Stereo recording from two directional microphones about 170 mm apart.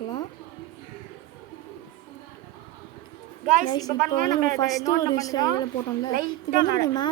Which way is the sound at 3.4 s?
50° right (ahead or behind).